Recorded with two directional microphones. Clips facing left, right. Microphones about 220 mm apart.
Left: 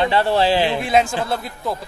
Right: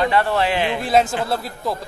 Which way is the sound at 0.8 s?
Centre (ahead or behind).